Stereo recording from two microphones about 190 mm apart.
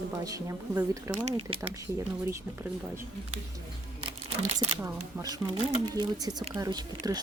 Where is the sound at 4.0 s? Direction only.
35° right (ahead or behind).